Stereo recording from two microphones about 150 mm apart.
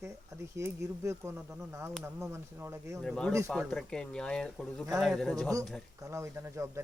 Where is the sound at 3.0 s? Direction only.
5° left (ahead or behind).